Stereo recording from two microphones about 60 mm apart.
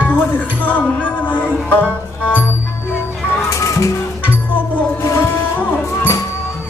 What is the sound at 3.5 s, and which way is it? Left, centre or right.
Music, left.